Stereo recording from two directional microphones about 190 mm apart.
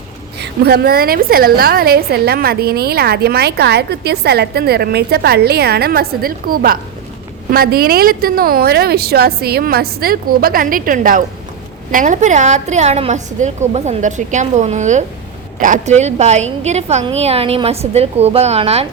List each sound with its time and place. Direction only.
0.3 s a woman's voice: 60° right (ahead or behind); by 18.9 s 35° right (ahead or behind)